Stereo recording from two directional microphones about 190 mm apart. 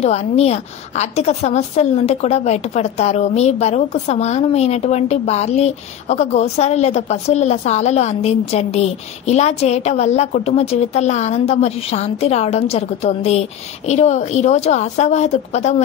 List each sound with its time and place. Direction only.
0.0 s a woman's voice: 35° left (ahead or behind)